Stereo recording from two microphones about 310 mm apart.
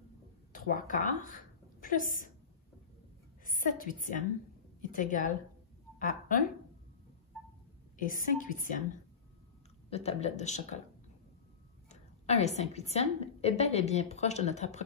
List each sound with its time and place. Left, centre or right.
0.5 s a woman's voice: left
3.4 s a woman's voice: left
8.0 s a woman's voice: left
9.8 s a woman's voice: centre
11.9 s a woman's voice: left